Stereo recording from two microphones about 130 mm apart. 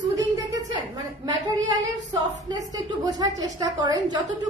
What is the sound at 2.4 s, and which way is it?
A child's voice, 30° right (ahead or behind).